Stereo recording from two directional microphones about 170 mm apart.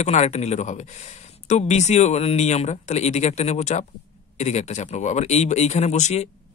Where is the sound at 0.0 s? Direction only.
40° left (ahead or behind).